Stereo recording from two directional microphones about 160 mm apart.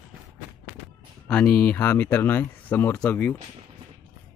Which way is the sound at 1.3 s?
5° left (ahead or behind).